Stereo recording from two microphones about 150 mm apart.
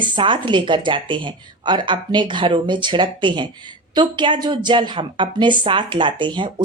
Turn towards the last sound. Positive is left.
turn(degrees=-30)  # may be behind; listen again after turning